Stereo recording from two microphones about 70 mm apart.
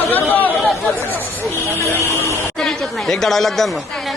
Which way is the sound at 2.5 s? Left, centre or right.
Centre.